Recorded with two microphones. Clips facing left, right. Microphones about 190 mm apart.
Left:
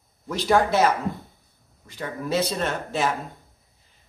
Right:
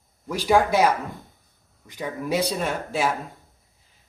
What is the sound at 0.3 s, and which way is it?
A man's voice, 10° right (ahead or behind).